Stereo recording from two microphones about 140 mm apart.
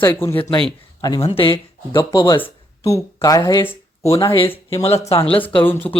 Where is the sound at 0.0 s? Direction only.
15° left (ahead or behind).